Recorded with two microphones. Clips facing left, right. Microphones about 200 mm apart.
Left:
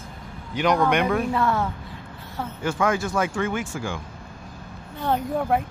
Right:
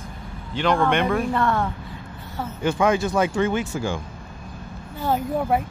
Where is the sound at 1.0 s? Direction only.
Centre (ahead or behind).